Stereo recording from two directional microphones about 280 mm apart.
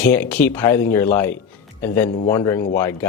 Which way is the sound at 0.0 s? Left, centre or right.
Centre.